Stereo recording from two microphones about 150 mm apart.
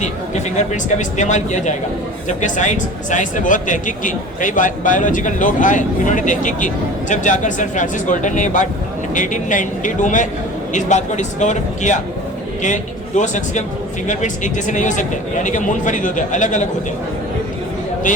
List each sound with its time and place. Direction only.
0.0 s a man's voice: 50° left (ahead or behind)